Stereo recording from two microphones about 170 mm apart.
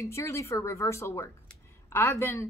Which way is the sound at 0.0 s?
15° left (ahead or behind).